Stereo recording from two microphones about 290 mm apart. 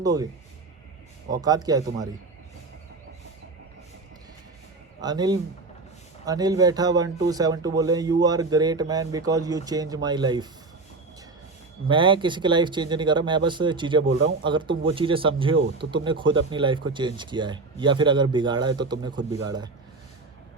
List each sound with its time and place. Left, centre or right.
0.0 s speech: centre
1.3 s speech: centre
4.9 s a man's voice: centre
11.9 s speech: centre
14.0 s a man's voice: right
14.4 s speech: centre